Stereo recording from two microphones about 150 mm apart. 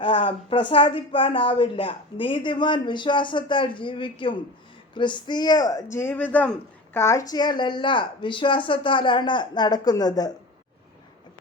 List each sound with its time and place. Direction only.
0.0 s speech: 35° left (ahead or behind); by 7.0 s 10° left (ahead or behind)
7.0 s speech: 20° left (ahead or behind)